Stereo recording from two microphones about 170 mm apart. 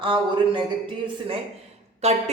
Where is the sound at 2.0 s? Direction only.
40° right (ahead or behind).